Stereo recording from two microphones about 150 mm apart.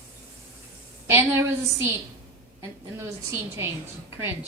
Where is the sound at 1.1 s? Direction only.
20° right (ahead or behind).